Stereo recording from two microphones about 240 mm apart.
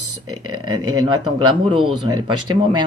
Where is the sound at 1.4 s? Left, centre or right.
Right.